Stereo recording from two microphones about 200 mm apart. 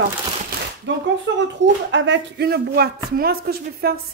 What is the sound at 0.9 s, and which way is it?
Speech, 60° right (ahead or behind).